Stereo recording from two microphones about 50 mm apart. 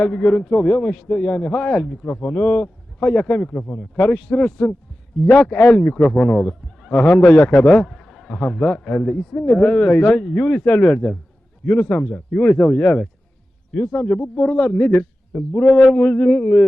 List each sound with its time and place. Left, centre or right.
0.0 s a man's voice: left
7.9 s a sound: centre
8.9 s a man's voice: centre